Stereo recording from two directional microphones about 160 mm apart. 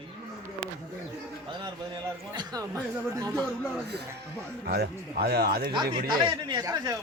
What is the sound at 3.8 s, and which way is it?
A man's voice, 90° right.